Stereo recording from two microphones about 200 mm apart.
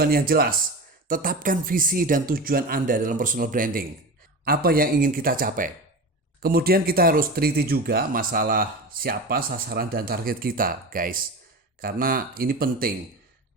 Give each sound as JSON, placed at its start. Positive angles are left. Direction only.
{"t": 0.0, "sound": "speech", "side_deg": -50}